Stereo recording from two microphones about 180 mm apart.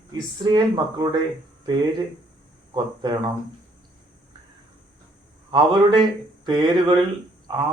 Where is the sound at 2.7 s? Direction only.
25° right (ahead or behind).